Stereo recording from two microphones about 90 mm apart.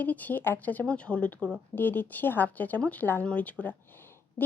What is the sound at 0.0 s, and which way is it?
Speech, 20° left (ahead or behind).